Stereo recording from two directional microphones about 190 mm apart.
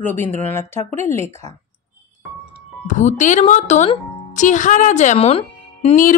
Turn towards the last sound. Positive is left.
turn(degrees=40)  # may be behind; listen again after turning